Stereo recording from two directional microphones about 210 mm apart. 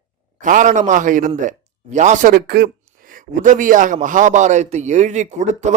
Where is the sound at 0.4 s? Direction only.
35° right (ahead or behind).